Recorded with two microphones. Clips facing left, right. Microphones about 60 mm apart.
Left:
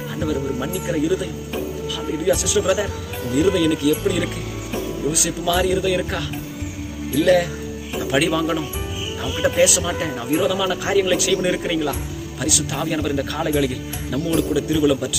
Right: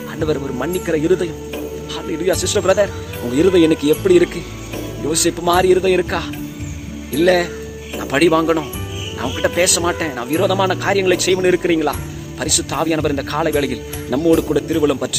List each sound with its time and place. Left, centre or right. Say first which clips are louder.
0.6 s speech: right 4 dB; right
2.0 s a man's voice: right 4 dB; right
2.2 s speech: right 3 dB; right
5.0 s speech: right 7 dB; right
9.6 s speech: right 1 dB; right
11.3 s speech: right 6 dB; right
14.5 s a man's voice: right 2 dB; right